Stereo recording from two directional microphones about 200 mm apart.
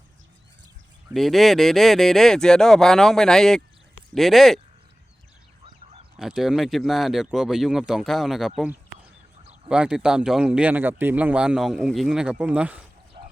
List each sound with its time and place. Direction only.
1.1 s speech: centre (ahead or behind)
5.6 s a sound: 25° right (ahead or behind)
6.1 s speech: centre (ahead or behind)